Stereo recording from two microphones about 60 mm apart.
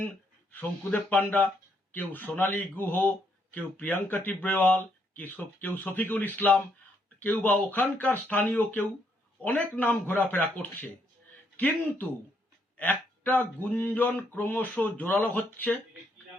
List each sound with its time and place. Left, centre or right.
1.1 s speech: left